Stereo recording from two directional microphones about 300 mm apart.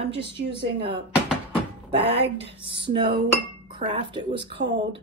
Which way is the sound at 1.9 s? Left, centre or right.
Centre.